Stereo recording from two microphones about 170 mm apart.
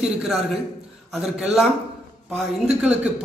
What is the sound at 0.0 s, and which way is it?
A man's voice, 5° right (ahead or behind).